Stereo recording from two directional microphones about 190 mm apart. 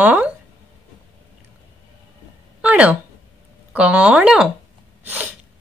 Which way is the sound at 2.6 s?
5° right (ahead or behind).